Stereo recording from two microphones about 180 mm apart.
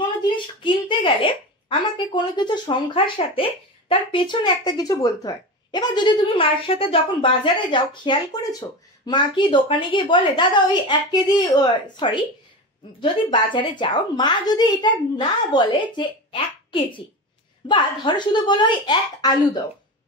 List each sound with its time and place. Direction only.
0.6 s speech: 25° left (ahead or behind)